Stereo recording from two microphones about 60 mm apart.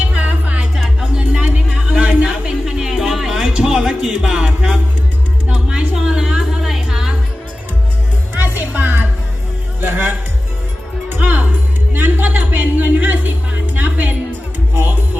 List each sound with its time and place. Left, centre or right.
0.2 s music: right
1.1 s a sound: centre
5.5 s music: centre
8.4 s music: right